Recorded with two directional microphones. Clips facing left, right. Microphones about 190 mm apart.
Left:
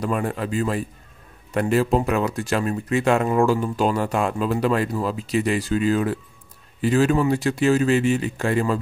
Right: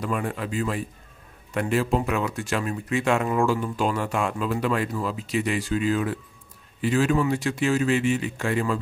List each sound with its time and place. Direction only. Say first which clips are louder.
0.0 s speech: left 4 dB; 40° left (ahead or behind)